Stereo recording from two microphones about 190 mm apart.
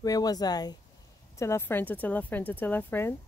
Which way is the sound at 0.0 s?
20° left (ahead or behind).